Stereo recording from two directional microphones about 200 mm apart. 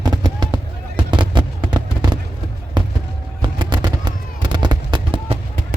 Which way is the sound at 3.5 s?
20° right (ahead or behind).